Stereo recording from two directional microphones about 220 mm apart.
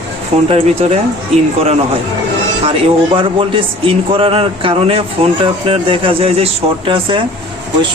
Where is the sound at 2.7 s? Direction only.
20° right (ahead or behind).